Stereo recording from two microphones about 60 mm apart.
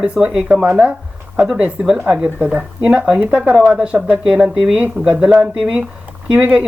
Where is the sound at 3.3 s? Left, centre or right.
Right.